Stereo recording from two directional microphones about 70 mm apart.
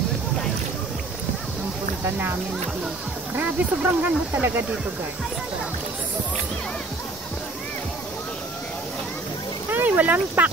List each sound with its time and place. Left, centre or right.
2.0 s speech: right
3.3 s speech: right
9.7 s speech: right